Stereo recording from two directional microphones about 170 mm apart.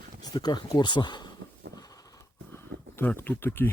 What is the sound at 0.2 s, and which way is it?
Speech, 25° left (ahead or behind).